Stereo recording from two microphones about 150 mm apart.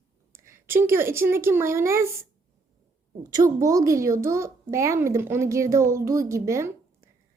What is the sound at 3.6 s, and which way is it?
A child's voice, 20° right (ahead or behind).